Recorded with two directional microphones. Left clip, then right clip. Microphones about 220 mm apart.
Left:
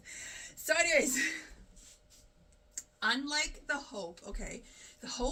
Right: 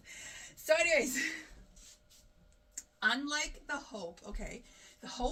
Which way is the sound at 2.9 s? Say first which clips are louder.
Even; 10° left (ahead or behind).